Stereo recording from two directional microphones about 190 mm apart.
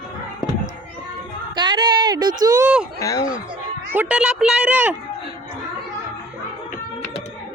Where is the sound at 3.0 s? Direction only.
20° left (ahead or behind).